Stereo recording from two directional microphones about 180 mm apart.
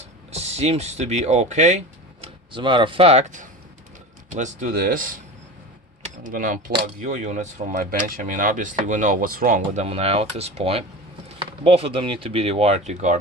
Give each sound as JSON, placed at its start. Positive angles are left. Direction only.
{"t": 0.3, "sound": "speech", "side_deg": -35}
{"t": 2.2, "sound": "speech", "side_deg": -25}
{"t": 6.2, "sound": "speech", "side_deg": -50}
{"t": 9.8, "sound": "speech", "side_deg": -35}